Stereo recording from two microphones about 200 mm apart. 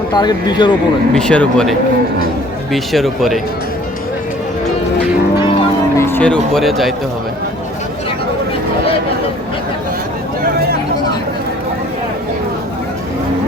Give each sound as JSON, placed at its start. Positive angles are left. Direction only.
{"t": 0.1, "sound": "speech", "side_deg": 20}
{"t": 1.1, "sound": "speech", "side_deg": 5}
{"t": 2.7, "sound": "speech", "side_deg": 0}
{"t": 6.0, "sound": "speech", "side_deg": 10}